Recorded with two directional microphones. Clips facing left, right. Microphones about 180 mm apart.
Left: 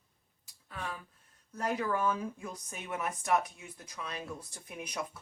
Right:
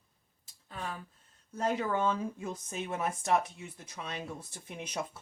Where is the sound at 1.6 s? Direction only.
25° right (ahead or behind).